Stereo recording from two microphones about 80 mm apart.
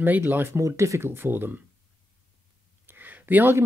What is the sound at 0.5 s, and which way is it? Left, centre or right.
Speech, right.